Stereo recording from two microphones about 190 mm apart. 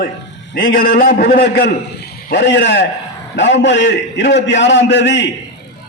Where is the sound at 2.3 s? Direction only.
70° left (ahead or behind).